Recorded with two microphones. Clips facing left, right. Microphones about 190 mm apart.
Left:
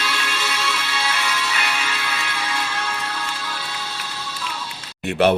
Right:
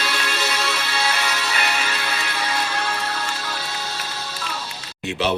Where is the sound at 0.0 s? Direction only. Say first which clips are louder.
Right 1 dB; 40° right (ahead or behind).